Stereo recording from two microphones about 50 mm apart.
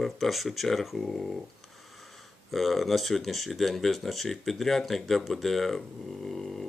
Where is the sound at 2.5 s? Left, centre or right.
Centre.